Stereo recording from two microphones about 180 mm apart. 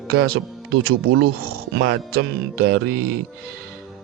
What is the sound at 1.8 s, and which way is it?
Speech, 75° right (ahead or behind).